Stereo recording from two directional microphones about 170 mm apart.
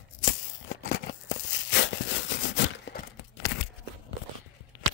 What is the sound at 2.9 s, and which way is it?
Tearing, 90° left.